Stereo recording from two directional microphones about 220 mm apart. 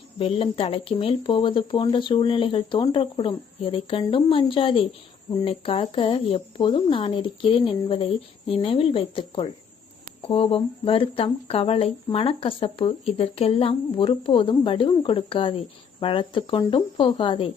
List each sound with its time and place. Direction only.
0.2 s speech: 25° left (ahead or behind)